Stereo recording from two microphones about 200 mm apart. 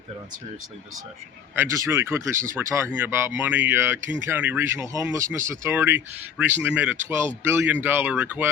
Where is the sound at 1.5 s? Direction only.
15° right (ahead or behind).